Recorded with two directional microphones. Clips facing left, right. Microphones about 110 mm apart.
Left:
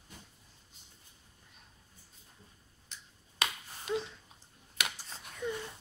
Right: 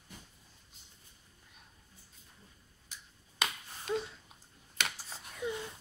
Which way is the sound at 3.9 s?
5° left (ahead or behind).